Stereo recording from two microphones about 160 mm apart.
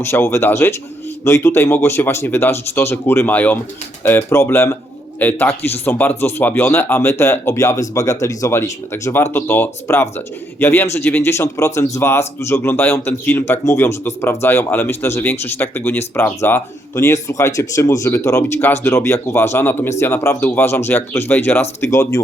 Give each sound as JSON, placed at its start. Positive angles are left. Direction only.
{"t": 0.0, "sound": "speech", "side_deg": 15}